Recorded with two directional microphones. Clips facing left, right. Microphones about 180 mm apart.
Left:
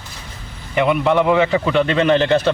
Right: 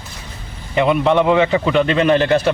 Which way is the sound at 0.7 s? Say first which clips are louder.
Right 1 dB; 25° right (ahead or behind).